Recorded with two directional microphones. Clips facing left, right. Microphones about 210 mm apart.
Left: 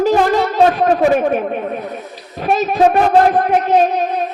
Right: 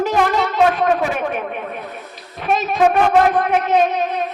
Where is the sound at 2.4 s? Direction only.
35° left (ahead or behind).